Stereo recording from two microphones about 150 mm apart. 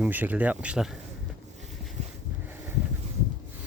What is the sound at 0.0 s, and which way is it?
Speech, 10° right (ahead or behind).